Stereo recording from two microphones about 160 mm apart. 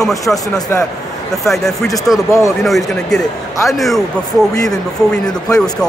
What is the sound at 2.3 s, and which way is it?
Speech, 20° left (ahead or behind).